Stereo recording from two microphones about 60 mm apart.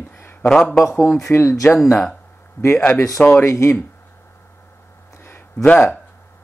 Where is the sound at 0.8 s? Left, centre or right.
Left.